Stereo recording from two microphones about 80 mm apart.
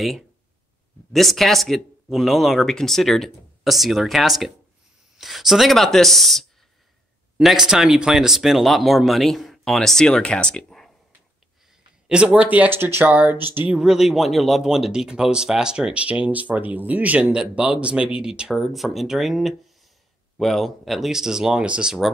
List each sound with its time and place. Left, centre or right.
1.1 s speech: centre
12.1 s speech: centre
13.7 s speech: centre